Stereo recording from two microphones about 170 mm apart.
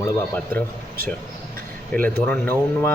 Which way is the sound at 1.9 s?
10° left (ahead or behind).